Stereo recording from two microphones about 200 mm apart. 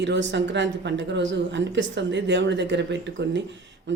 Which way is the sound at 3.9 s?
65° right (ahead or behind).